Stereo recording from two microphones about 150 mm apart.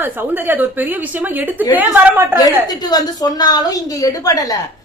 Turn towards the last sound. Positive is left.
turn(degrees=25)  # may be behind; listen again after turning